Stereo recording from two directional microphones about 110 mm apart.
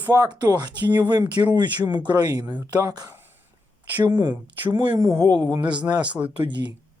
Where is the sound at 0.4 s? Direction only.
40° right (ahead or behind).